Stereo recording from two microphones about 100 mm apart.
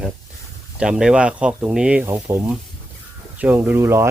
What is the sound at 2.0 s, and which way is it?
Speech, 25° right (ahead or behind).